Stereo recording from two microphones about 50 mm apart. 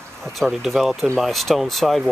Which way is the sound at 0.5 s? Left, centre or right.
Centre.